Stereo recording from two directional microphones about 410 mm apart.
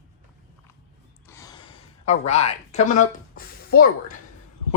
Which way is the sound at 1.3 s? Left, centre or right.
Centre.